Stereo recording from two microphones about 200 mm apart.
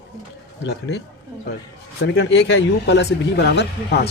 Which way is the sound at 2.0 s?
65° left (ahead or behind).